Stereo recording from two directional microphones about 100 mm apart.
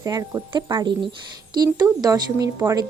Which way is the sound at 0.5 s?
55° right (ahead or behind).